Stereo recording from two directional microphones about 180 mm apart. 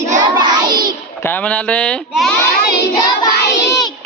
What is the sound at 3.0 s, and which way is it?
Child singing, 20° left (ahead or behind).